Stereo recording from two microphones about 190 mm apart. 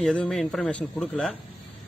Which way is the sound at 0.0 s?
5° left (ahead or behind).